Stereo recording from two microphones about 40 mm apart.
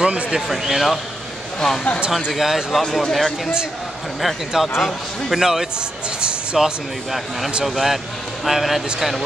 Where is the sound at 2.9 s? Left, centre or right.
Centre.